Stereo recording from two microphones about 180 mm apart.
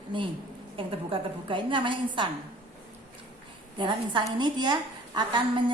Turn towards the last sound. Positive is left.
turn(degrees=-25)  # may be behind; listen again after turning